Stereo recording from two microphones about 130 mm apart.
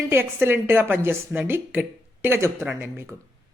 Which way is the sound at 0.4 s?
15° right (ahead or behind).